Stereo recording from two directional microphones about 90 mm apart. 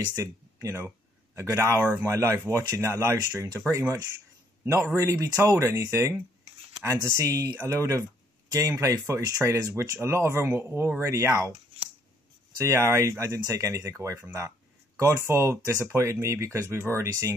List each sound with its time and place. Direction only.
0.2 s speech: 35° right (ahead or behind)
4.6 s speech: 35° right (ahead or behind)
11.1 s speech: 35° right (ahead or behind)
12.6 s speech: 30° right (ahead or behind)